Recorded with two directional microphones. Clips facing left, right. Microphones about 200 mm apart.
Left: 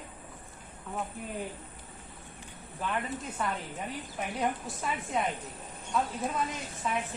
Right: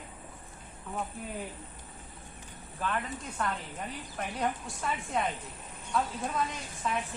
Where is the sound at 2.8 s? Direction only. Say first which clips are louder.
Left 1 dB; 10° left (ahead or behind).